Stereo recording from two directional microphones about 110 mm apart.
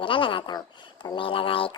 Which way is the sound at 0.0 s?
50° left (ahead or behind).